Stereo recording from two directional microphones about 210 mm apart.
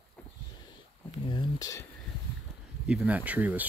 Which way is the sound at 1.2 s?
20° left (ahead or behind).